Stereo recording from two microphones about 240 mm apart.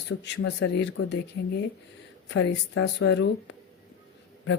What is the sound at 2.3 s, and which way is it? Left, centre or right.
Speech, left.